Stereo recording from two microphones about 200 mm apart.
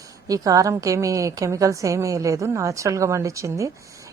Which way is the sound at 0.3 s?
15° right (ahead or behind).